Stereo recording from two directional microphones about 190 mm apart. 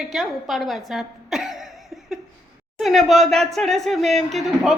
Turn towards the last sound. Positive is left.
turn(degrees=0)  # may be behind; listen again after turning